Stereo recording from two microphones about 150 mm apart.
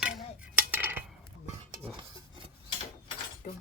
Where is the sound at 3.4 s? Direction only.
60° left (ahead or behind).